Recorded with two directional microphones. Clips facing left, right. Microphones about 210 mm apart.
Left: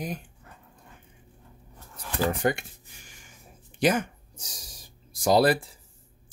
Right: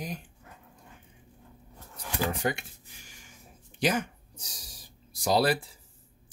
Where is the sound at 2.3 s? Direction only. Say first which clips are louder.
Left 6 dB; 50° left (ahead or behind).